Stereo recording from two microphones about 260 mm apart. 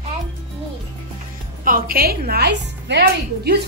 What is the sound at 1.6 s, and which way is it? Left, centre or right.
A woman's voice, right.